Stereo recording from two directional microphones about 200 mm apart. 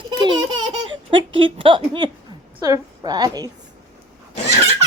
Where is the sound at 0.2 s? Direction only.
20° right (ahead or behind).